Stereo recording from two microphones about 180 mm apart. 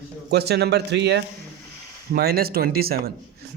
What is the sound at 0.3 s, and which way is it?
Speech, 65° right (ahead or behind).